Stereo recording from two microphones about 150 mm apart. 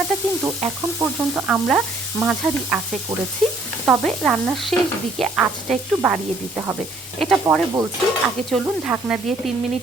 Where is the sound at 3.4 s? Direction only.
Centre (ahead or behind).